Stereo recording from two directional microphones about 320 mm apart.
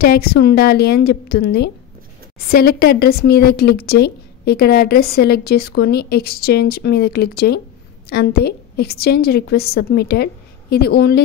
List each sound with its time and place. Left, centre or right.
0.0 s speech: left